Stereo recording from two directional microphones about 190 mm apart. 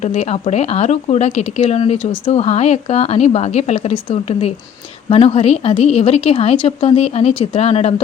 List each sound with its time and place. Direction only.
0.0 s speech: 35° left (ahead or behind)